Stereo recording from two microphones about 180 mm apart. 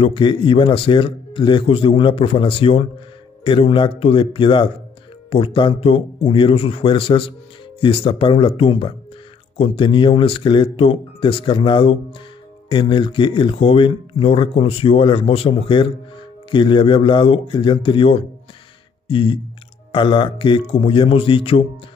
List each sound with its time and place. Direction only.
0.0 s speech: 30° left (ahead or behind)